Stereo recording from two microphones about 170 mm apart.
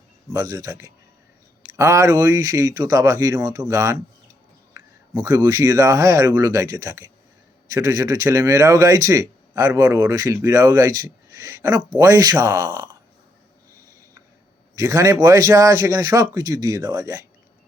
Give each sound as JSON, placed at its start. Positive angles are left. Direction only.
{"t": 0.3, "sound": "speech", "side_deg": -20}
{"t": 14.8, "sound": "speech", "side_deg": -20}